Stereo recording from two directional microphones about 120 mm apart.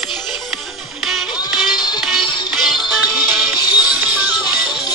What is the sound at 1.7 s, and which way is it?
Music, 35° left (ahead or behind).